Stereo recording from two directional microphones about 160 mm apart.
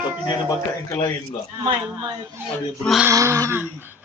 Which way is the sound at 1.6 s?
25° right (ahead or behind).